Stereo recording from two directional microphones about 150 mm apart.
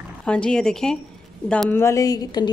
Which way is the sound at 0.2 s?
5° left (ahead or behind).